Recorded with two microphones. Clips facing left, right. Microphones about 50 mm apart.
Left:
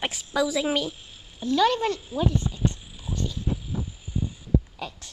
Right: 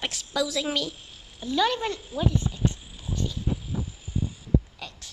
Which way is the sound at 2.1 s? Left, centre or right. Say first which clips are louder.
Left 1 dB; centre.